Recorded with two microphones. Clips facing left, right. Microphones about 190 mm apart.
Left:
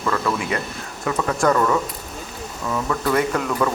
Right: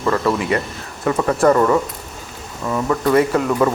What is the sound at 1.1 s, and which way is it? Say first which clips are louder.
Speech: right 5 dB; 5° right (ahead or behind).